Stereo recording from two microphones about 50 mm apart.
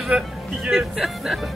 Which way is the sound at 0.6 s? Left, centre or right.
Centre.